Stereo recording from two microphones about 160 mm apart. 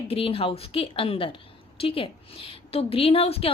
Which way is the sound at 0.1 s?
35° left (ahead or behind).